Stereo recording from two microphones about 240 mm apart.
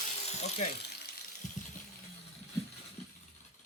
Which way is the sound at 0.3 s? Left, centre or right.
Left.